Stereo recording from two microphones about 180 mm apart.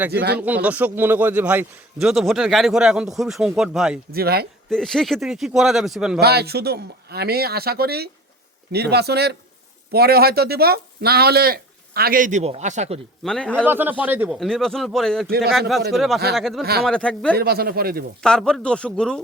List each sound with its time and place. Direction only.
0.1 s speech: 65° right (ahead or behind)
0.3 s a man's voice: 10° right (ahead or behind)
4.1 s speech: 60° right (ahead or behind)
4.7 s a man's voice: centre (ahead or behind)
6.1 s speech: 65° right (ahead or behind); by 13.0 s 40° right (ahead or behind)
13.2 s a man's voice: 5° left (ahead or behind)
13.7 s speech: 10° right (ahead or behind)
14.3 s a man's voice: centre (ahead or behind)
17.3 s speech: 60° right (ahead or behind)
18.2 s a man's voice: 5° left (ahead or behind)